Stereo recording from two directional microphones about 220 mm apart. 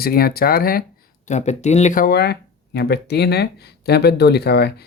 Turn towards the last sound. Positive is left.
turn(degrees=45)  # may be behind; listen again after turning